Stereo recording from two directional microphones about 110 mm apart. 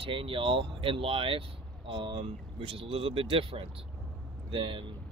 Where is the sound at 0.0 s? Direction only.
55° right (ahead or behind).